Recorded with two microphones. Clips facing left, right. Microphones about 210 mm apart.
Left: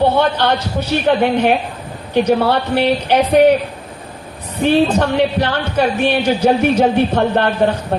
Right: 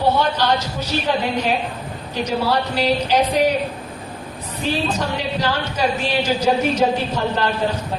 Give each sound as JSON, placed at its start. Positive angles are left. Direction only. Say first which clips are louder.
{"t": 0.2, "sound": "speech", "louder": "left 4 dB", "side_deg": 60}
{"t": 4.6, "sound": "speech", "louder": "left 9 dB", "side_deg": 60}